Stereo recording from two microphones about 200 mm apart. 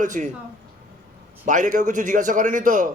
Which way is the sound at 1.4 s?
40° right (ahead or behind).